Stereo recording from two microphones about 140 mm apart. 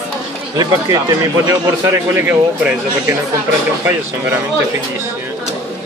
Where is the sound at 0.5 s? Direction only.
25° right (ahead or behind).